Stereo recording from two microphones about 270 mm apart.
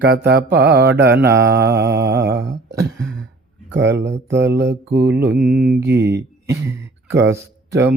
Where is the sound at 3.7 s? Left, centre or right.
Right.